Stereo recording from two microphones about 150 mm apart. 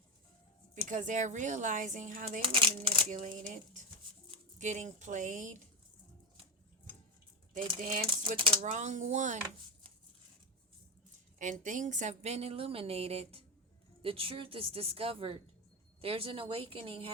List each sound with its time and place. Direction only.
0.9 s speech: 60° right (ahead or behind)
2.4 s a woman's voice: 35° right (ahead or behind)
3.4 s speech: 55° right (ahead or behind)
7.8 s speech: 60° right (ahead or behind)
8.0 s a woman's voice: 35° right (ahead or behind)
8.6 s a woman's voice: 55° right (ahead or behind)
11.3 s a woman's voice: 60° right (ahead or behind); by 17.1 s 40° right (ahead or behind)